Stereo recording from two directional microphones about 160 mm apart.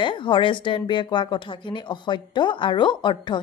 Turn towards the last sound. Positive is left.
turn(degrees=30)  # may be behind; listen again after turning